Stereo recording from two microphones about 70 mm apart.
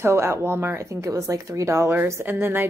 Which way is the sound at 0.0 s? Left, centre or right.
Right.